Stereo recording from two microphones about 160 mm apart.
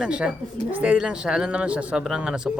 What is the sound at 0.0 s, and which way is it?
A man's voice, 5° right (ahead or behind).